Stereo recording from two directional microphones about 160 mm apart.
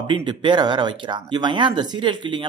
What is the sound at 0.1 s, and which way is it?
Speech, 30° right (ahead or behind).